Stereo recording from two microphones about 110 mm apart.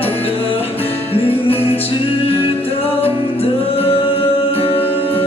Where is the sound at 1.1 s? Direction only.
60° left (ahead or behind).